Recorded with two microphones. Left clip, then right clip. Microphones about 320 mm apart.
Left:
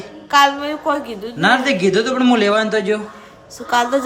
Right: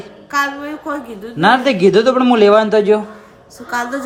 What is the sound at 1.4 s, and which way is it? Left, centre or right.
A man's voice, centre.